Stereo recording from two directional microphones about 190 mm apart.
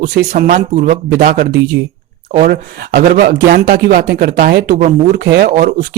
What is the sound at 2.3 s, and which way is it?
Speech, 55° right (ahead or behind).